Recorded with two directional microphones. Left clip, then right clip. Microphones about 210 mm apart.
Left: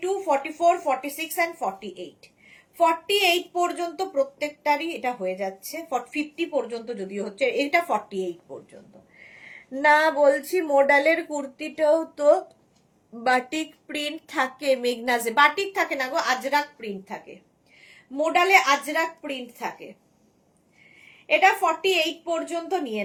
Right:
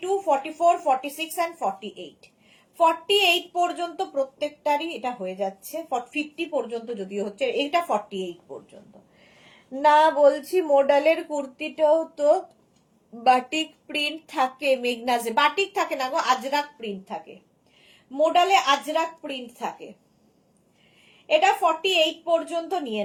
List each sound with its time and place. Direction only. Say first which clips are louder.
0.0 s a woman's voice: right 1 dB; 15° left (ahead or behind)
9.9 s a woman's voice: right 1 dB; 20° left (ahead or behind)
21.2 s speech: even; 20° left (ahead or behind)